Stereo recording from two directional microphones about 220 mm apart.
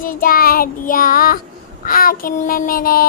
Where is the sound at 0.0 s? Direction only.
40° left (ahead or behind).